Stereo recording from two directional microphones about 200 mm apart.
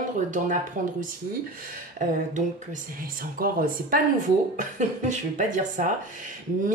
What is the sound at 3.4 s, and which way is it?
Speech, 45° right (ahead or behind).